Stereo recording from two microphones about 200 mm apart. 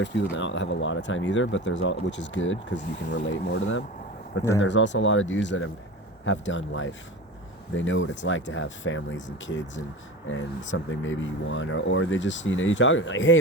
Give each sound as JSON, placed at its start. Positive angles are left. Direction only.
{"t": 0.3, "sound": "speech", "side_deg": 65}
{"t": 2.7, "sound": "speech", "side_deg": 40}
{"t": 3.2, "sound": "speech", "side_deg": 65}